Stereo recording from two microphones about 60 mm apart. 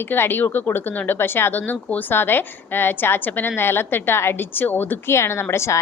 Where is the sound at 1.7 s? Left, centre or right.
Left.